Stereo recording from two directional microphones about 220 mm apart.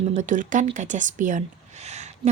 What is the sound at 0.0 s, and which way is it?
Speech, 30° right (ahead or behind).